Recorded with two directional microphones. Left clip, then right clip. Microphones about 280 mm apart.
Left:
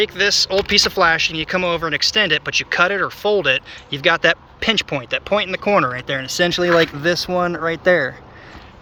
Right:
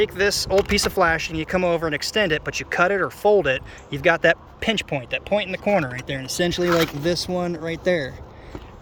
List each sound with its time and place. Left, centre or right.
0.0 s speech: centre